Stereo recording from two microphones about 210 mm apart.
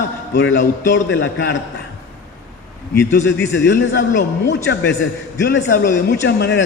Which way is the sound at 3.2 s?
60° left (ahead or behind).